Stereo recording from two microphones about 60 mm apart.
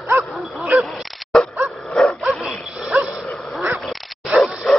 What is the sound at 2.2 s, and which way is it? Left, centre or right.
Dog, centre.